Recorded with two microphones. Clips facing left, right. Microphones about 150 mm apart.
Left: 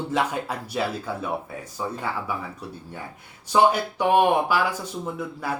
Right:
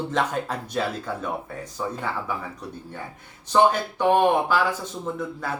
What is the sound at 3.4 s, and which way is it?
Speech, 10° left (ahead or behind).